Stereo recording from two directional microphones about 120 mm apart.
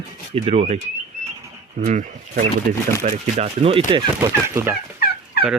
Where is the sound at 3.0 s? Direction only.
65° right (ahead or behind).